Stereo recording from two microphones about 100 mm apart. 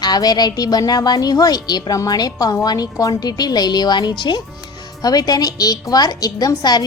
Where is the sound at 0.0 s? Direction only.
40° left (ahead or behind).